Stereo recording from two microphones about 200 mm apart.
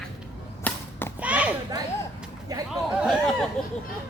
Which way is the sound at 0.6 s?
10° left (ahead or behind).